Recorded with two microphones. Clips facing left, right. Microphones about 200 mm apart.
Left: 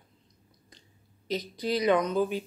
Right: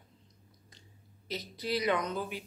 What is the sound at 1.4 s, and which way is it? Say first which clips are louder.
Speech: left 4 dB; 20° left (ahead or behind).